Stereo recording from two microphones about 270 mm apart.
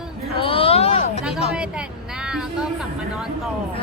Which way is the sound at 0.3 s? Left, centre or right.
Centre.